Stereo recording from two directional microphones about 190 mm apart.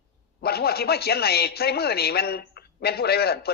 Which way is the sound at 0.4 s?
55° left (ahead or behind).